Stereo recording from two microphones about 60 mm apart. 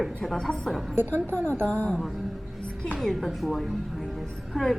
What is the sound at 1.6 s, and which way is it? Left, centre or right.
Speech, left.